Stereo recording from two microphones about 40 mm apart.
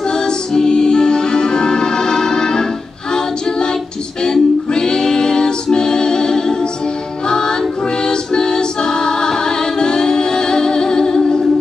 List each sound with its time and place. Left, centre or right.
0.1 s music: centre
4.2 s music: centre